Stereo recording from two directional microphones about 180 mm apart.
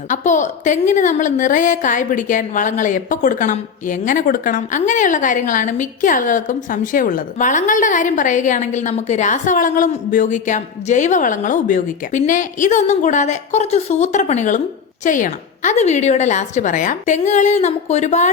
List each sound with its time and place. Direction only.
0.1 s a woman's voice: 45° left (ahead or behind)